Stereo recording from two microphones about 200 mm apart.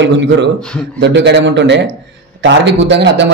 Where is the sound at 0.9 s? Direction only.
65° right (ahead or behind).